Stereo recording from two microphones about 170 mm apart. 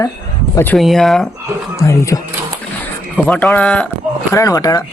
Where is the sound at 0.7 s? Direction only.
Centre (ahead or behind).